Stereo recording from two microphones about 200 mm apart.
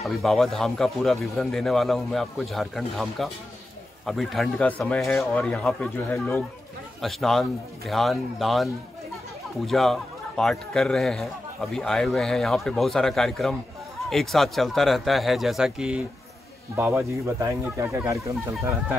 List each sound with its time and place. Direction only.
0.0 s speech: centre (ahead or behind)
9.7 s speech: centre (ahead or behind)